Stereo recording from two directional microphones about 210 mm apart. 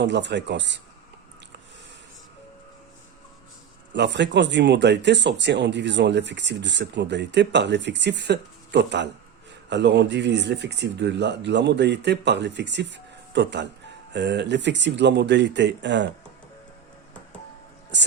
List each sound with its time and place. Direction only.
0.0 s speech: 55° right (ahead or behind)
3.9 s speech: 55° right (ahead or behind)
17.9 s speech: 55° right (ahead or behind)